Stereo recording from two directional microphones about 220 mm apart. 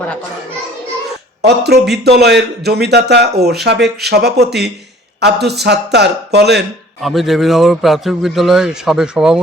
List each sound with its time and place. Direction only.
1.4 s a man's voice: 50° right (ahead or behind)
7.0 s a man's voice: centre (ahead or behind)